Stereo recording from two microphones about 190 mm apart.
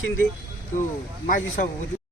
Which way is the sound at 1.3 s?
45° left (ahead or behind).